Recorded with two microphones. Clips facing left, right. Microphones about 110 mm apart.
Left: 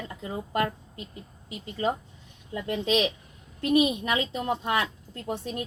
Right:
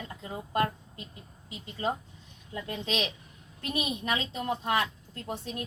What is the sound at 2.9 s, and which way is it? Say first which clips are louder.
Speech: left 8 dB; 20° left (ahead or behind).